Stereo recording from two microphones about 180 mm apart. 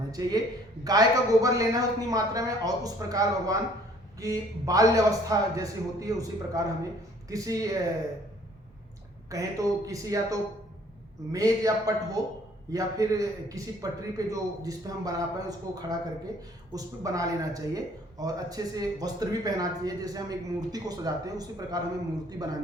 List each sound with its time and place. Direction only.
0.1 s speech: 20° right (ahead or behind)
9.3 s speech: 20° right (ahead or behind)